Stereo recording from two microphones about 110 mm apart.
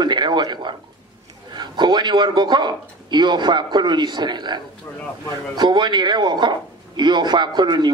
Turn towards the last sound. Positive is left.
turn(degrees=-40)  # may be behind; listen again after turning